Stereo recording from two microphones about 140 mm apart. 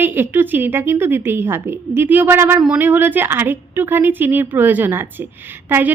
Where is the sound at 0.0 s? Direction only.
15° right (ahead or behind).